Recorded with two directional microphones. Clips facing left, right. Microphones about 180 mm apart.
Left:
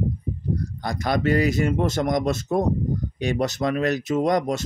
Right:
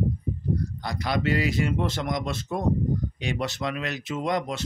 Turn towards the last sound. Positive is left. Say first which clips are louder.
# left 6 dB
turn(degrees=45)  # may be behind; listen again after turning